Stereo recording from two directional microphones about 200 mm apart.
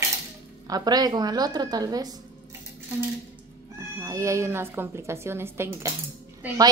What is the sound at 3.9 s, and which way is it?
A woman's voice, 15° right (ahead or behind).